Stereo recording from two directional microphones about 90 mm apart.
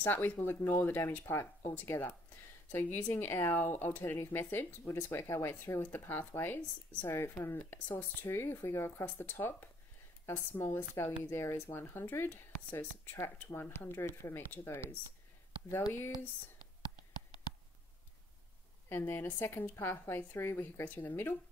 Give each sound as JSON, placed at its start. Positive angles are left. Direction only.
{"t": 0.0, "sound": "a woman's voice", "side_deg": 20}
{"t": 15.9, "sound": "speech", "side_deg": 25}
{"t": 18.9, "sound": "speech", "side_deg": 25}